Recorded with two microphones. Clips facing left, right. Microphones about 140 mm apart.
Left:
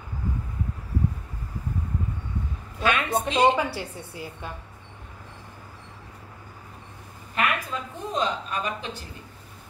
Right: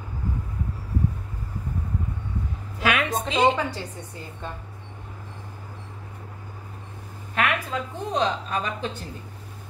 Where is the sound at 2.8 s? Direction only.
90° right.